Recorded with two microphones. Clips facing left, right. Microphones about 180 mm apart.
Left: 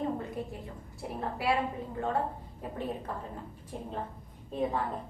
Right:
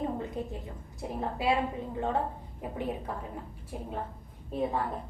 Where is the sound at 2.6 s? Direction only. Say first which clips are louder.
Right 2 dB; 15° right (ahead or behind).